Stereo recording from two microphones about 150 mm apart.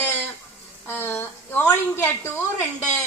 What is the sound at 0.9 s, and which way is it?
A woman's voice, 15° left (ahead or behind).